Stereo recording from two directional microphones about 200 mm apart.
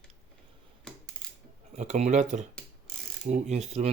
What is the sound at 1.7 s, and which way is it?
Speech, 35° right (ahead or behind).